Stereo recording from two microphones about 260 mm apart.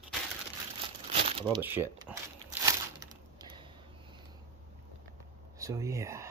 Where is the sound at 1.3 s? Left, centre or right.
Centre.